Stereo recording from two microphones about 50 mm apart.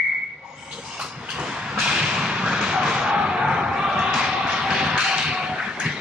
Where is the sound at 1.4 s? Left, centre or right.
Centre.